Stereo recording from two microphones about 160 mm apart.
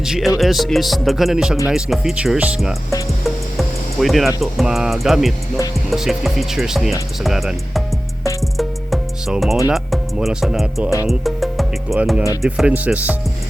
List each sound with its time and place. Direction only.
0.0 s speech: 5° right (ahead or behind)
0.3 s music: centre (ahead or behind)
12.4 s speech: 5° right (ahead or behind)